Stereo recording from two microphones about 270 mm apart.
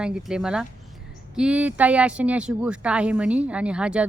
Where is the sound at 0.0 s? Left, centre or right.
Centre.